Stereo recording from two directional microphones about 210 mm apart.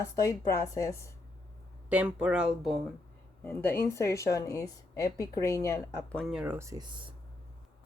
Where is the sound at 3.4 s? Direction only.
10° left (ahead or behind); by 6.9 s 15° right (ahead or behind).